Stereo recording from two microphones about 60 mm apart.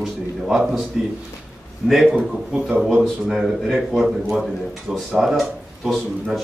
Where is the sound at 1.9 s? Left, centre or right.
Centre.